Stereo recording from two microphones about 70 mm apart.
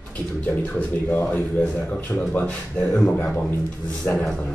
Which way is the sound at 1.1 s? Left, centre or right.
Left.